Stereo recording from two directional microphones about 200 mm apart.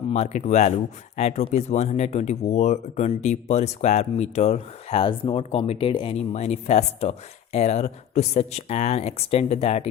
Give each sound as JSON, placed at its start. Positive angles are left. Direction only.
{"t": 0.1, "sound": "speech", "side_deg": 35}